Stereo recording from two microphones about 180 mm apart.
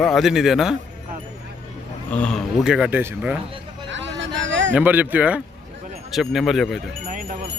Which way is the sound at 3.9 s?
90° right.